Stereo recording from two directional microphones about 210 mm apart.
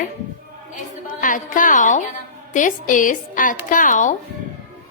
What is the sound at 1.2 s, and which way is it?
A woman's voice, 40° left (ahead or behind).